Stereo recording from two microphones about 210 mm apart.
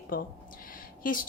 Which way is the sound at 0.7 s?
40° left (ahead or behind).